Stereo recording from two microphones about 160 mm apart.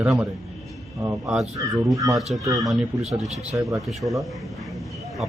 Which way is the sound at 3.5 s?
20° right (ahead or behind).